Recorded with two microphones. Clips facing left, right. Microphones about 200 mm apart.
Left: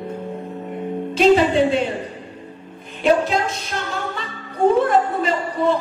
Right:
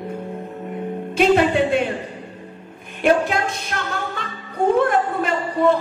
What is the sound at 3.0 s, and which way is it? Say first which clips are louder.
Speech: even; 55° right (ahead or behind).